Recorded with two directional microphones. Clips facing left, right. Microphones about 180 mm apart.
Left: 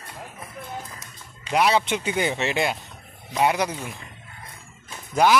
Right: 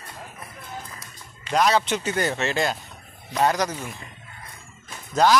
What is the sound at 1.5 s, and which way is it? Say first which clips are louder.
A man's voice: even; 10° left (ahead or behind).